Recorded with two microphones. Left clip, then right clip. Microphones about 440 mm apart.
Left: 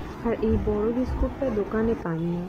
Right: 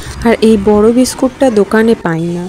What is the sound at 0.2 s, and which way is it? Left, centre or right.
Speech, left.